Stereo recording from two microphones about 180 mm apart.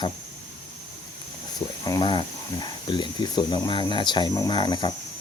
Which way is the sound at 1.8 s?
20° left (ahead or behind).